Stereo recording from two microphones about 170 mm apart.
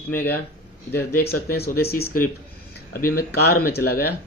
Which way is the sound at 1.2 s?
65° left (ahead or behind).